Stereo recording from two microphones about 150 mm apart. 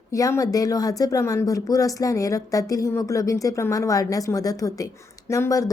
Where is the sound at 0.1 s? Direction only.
20° left (ahead or behind).